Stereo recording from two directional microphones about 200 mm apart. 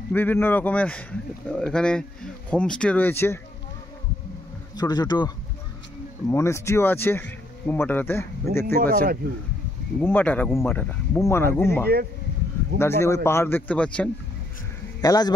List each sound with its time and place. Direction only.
0.1 s a man's voice: 10° left (ahead or behind)
4.7 s speech: 20° left (ahead or behind)
9.9 s speech: 10° left (ahead or behind)
15.0 s speech: 20° left (ahead or behind)